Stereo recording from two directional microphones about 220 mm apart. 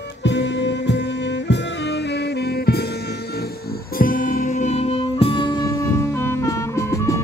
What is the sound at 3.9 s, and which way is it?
Music, 40° left (ahead or behind).